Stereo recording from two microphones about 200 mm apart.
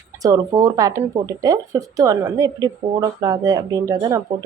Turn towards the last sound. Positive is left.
turn(degrees=-20)  # may be behind; listen again after turning